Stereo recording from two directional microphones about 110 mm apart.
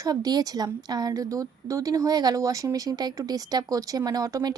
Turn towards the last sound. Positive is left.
turn(degrees=-35)  # may be behind; listen again after turning